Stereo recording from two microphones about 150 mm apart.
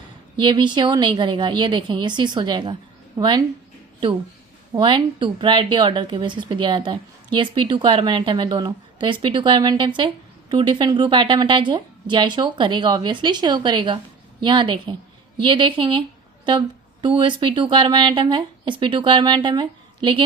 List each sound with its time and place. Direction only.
0.3 s speech: 30° right (ahead or behind)
4.8 s speech: 35° right (ahead or behind)